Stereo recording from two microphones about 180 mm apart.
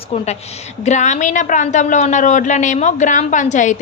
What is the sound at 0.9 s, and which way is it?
A woman's voice, 40° left (ahead or behind).